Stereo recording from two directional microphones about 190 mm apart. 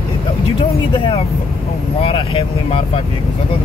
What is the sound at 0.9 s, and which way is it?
Speech, 30° left (ahead or behind).